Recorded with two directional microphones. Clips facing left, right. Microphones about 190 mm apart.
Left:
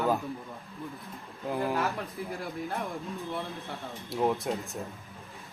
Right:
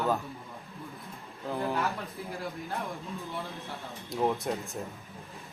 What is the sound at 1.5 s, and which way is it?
Speech, 15° left (ahead or behind).